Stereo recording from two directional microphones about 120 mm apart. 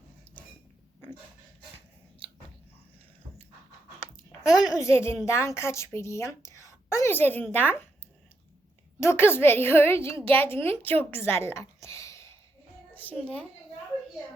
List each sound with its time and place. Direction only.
4.7 s a woman's voice: 25° left (ahead or behind)
9.0 s a woman's voice: 20° left (ahead or behind)
10.8 s a sound: 15° left (ahead or behind)
12.9 s a woman's voice: 15° left (ahead or behind)